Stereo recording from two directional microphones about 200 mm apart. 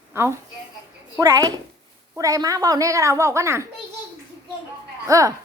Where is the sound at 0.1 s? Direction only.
15° right (ahead or behind).